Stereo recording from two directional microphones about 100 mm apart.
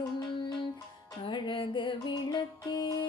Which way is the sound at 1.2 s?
55° left (ahead or behind).